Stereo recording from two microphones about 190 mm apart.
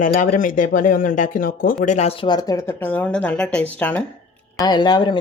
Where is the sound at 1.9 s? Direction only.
35° left (ahead or behind); by 4.0 s 10° left (ahead or behind).